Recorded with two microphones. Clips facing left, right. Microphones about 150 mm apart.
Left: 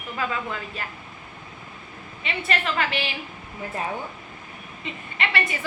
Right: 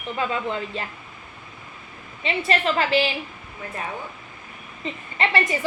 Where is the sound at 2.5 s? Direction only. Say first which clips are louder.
Right 4 dB; 30° right (ahead or behind).